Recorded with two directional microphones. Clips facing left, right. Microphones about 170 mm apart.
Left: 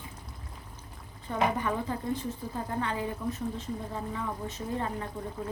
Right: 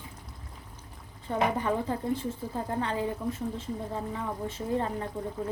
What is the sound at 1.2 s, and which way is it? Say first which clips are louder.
Speech: right 1 dB; 30° right (ahead or behind).